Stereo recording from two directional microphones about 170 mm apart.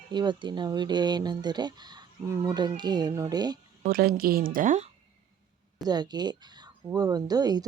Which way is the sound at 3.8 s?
60° right (ahead or behind).